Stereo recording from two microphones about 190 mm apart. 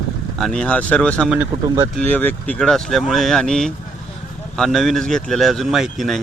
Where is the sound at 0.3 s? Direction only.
5° left (ahead or behind).